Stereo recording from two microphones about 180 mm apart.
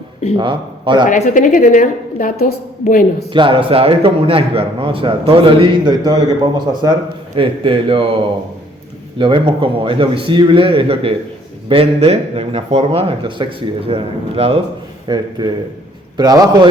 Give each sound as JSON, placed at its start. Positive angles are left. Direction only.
{"t": 0.3, "sound": "a man's voice", "side_deg": -25}
{"t": 1.0, "sound": "a woman's voice", "side_deg": 45}
{"t": 3.3, "sound": "a man's voice", "side_deg": -30}